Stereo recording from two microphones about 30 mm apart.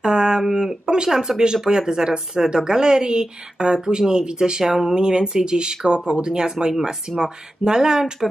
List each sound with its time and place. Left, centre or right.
0.0 s a sound: right
0.4 s speech: centre
0.8 s speech: right
1.1 s speech: centre
4.9 s speech: right